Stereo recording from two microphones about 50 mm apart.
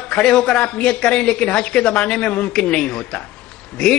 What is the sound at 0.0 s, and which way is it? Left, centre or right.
A woman's voice, centre.